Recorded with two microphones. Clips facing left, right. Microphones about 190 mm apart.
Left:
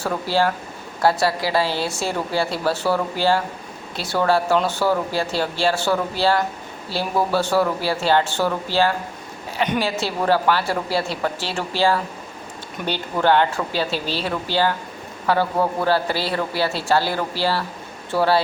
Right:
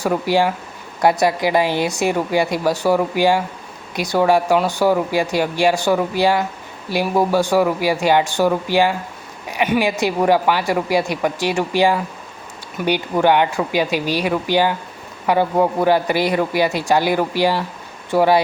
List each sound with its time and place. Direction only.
0.0 s speech: 15° right (ahead or behind)